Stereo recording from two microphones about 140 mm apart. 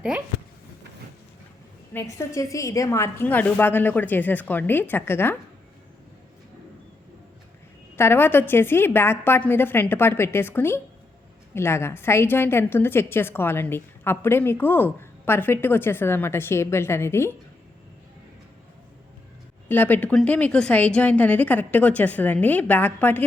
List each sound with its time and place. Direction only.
1.9 s a woman's voice: 15° left (ahead or behind)
7.9 s a woman's voice: 15° left (ahead or behind)
19.6 s a woman's voice: 15° left (ahead or behind)